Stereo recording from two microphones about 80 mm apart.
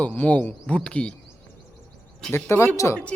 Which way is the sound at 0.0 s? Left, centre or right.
Centre.